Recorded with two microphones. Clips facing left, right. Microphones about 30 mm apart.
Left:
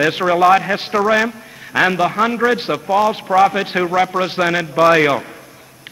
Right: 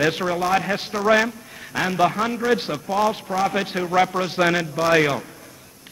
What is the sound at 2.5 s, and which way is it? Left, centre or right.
Speech, left.